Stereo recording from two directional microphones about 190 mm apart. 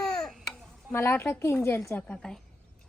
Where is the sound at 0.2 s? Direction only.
Centre (ahead or behind).